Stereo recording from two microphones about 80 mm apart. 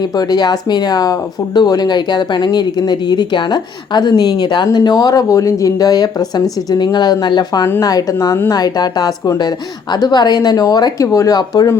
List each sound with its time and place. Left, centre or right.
0.0 s speech: left
5.3 s speech: left
7.8 s speech: left